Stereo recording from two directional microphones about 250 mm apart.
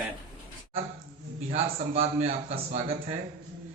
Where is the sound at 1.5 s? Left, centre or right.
Right.